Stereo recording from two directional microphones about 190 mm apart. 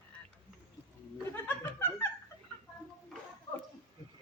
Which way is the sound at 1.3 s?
10° left (ahead or behind).